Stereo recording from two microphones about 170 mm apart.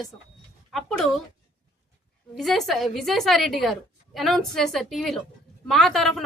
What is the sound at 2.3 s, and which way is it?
A woman's voice, centre (ahead or behind).